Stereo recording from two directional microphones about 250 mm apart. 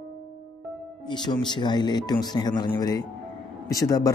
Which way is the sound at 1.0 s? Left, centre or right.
Centre.